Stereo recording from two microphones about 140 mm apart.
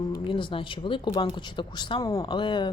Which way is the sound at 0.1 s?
35° left (ahead or behind).